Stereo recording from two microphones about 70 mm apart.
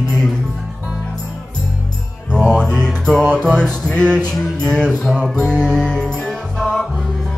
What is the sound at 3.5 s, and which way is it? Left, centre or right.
Male singing, centre.